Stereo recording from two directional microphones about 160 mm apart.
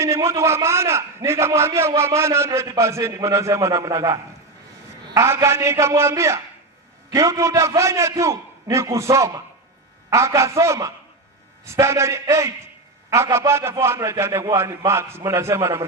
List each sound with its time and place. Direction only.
0.0 s a man's voice: 15° right (ahead or behind)